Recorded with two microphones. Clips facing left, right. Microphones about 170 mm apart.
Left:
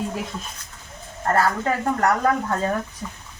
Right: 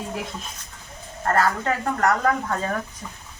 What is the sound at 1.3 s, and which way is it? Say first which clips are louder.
Speech: left 1 dB; 15° left (ahead or behind).